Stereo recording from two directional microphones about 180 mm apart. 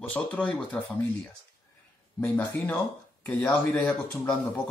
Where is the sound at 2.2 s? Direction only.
10° left (ahead or behind).